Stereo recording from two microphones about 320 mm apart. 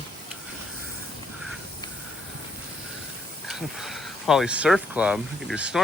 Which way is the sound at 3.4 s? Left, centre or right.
Centre.